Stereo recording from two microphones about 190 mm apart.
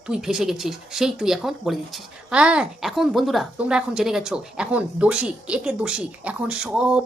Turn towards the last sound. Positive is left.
turn(degrees=-5)  # may be behind; listen again after turning